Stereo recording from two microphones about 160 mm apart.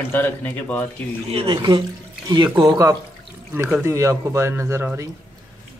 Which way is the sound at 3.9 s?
20° right (ahead or behind).